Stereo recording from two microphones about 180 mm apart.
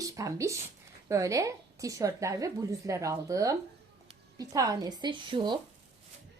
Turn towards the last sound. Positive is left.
turn(degrees=-25)  # may be behind; listen again after turning